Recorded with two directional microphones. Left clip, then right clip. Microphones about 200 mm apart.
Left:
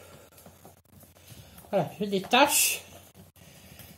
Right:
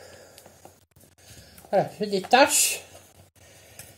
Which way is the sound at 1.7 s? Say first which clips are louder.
Right 4 dB; 20° right (ahead or behind).